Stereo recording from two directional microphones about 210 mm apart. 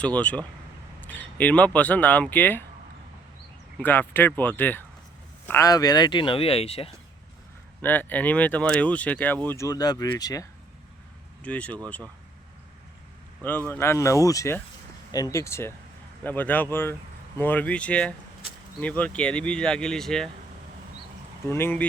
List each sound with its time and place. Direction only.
0.0 s speech: 5° left (ahead or behind)
3.8 s speech: 10° left (ahead or behind); by 6.9 s 30° left (ahead or behind)
7.8 s speech: 10° left (ahead or behind)
11.4 s speech: 5° left (ahead or behind)
13.7 s speech: 10° left (ahead or behind)
21.5 s speech: 10° left (ahead or behind)